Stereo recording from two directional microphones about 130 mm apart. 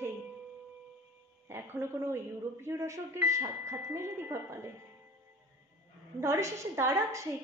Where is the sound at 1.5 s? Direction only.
20° right (ahead or behind).